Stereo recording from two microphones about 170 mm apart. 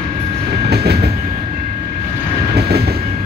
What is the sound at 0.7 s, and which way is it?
Train, 70° right (ahead or behind).